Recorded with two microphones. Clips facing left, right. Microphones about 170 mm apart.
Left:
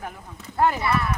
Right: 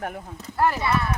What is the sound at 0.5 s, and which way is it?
Speech, 20° left (ahead or behind).